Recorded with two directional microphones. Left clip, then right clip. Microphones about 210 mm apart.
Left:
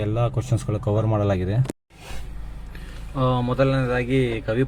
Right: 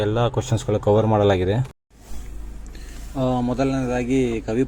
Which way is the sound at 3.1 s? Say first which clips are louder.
Left 1 dB; 20° right (ahead or behind).